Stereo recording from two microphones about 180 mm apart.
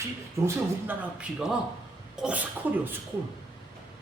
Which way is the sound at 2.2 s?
5° right (ahead or behind).